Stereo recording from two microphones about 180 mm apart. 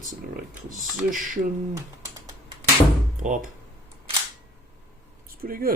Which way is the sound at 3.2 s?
45° right (ahead or behind).